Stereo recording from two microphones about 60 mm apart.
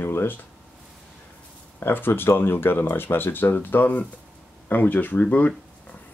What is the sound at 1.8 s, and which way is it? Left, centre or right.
Speech, left.